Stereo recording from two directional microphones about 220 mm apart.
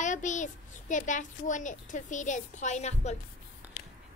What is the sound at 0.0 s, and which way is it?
A child's voice, 35° left (ahead or behind).